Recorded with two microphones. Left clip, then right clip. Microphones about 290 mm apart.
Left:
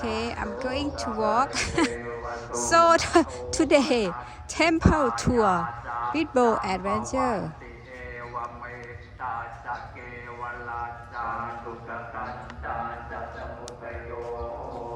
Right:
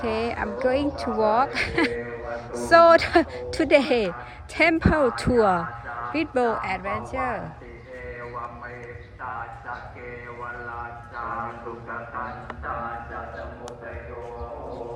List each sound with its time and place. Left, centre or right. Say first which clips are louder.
0.0 s a woman's voice: right 3 dB; centre
11.9 s speech: right 3 dB; centre